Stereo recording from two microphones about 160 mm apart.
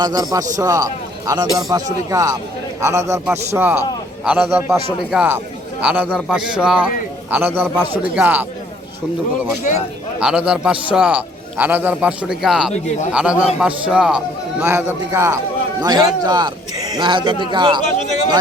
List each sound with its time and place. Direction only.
0.0 s a man's voice: 25° right (ahead or behind)
10.2 s a man's voice: 5° right (ahead or behind); by 17.8 s 30° right (ahead or behind)